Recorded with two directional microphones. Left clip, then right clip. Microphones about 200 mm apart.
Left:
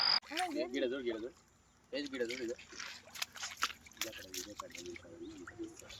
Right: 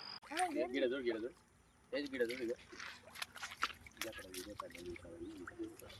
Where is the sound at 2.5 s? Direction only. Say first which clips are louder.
Left 2 dB; 30° left (ahead or behind).